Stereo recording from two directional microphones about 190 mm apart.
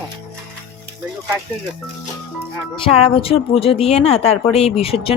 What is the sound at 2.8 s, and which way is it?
A woman's voice, 30° left (ahead or behind).